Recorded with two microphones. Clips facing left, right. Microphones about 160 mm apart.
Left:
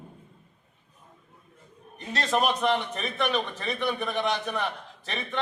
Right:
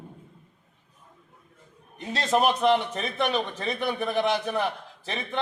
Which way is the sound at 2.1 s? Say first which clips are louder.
Right 2 dB; 25° right (ahead or behind).